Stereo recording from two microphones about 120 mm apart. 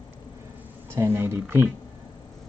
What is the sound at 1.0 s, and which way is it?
Speech, 20° right (ahead or behind).